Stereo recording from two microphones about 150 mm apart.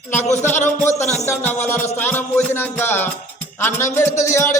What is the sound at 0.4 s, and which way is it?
Music, 15° left (ahead or behind).